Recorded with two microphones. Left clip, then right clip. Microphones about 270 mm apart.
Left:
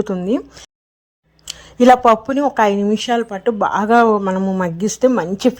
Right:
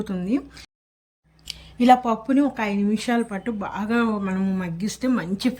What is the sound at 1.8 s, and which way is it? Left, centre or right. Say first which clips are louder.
Speech: left 7 dB; left.